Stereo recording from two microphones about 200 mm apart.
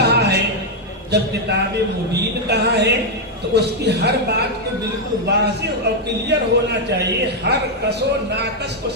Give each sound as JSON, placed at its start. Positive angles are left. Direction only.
{"t": 0.1, "sound": "music", "side_deg": -55}
{"t": 1.1, "sound": "speech", "side_deg": -55}